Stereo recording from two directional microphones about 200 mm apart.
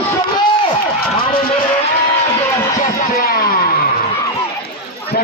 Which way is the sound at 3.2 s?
45° left (ahead or behind).